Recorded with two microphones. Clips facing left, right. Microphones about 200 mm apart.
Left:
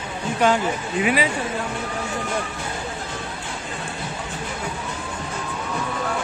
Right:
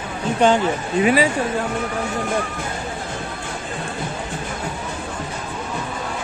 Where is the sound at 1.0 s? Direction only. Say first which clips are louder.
Right 5 dB; 40° right (ahead or behind).